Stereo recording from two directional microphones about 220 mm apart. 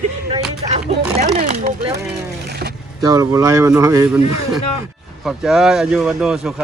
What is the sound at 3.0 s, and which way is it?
Speech, 15° right (ahead or behind).